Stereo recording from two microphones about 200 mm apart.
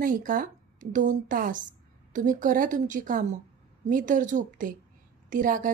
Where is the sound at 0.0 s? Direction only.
40° right (ahead or behind).